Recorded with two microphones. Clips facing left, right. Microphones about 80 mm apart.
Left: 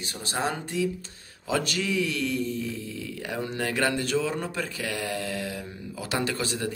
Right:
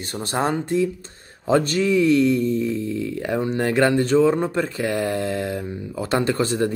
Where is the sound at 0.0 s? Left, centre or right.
Right.